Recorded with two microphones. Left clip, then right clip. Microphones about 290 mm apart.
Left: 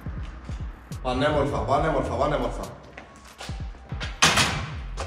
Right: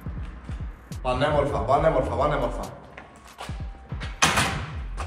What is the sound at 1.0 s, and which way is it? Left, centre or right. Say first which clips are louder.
A man's voice: right 1 dB; right.